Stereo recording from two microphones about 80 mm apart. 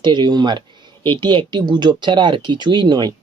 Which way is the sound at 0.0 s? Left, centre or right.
Right.